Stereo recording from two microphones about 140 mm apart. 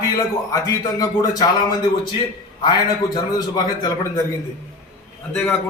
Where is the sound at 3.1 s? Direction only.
25° left (ahead or behind).